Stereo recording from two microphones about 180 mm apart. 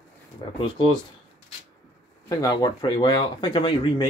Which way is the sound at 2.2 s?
20° left (ahead or behind).